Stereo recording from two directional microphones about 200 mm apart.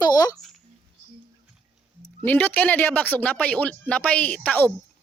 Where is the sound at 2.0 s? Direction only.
10° left (ahead or behind).